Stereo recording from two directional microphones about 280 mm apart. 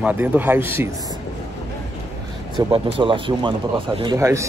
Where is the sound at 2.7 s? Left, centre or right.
Centre.